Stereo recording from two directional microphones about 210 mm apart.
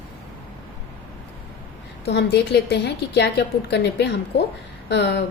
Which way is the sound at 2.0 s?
55° left (ahead or behind).